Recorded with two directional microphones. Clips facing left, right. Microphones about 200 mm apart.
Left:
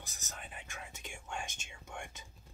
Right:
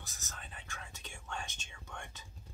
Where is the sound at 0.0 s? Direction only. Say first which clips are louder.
Left 2 dB; 15° left (ahead or behind).